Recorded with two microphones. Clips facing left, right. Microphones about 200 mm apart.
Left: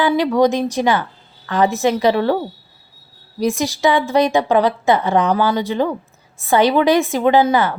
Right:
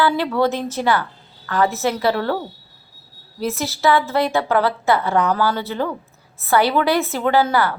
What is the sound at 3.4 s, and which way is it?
A woman's voice, 15° left (ahead or behind).